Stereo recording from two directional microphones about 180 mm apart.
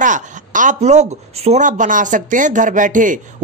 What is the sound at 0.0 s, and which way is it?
A woman's voice, 45° right (ahead or behind).